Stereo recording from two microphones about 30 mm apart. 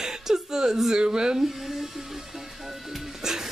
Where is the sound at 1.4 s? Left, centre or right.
Centre.